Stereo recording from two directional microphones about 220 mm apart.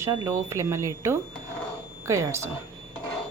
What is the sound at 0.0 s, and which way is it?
Speech, 15° right (ahead or behind).